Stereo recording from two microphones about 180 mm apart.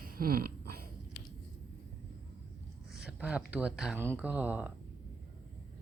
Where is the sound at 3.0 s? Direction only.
5° right (ahead or behind).